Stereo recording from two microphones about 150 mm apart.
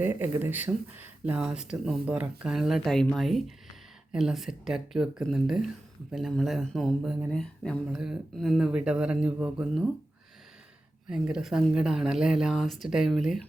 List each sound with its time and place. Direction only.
0.0 s speech: 15° right (ahead or behind)
11.1 s speech: 5° right (ahead or behind)